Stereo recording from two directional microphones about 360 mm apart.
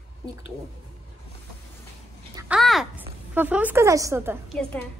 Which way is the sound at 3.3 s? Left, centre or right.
Centre.